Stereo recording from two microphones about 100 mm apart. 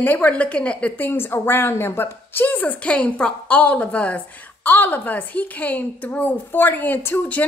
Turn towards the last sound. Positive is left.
turn(degrees=15)  # may be behind; listen again after turning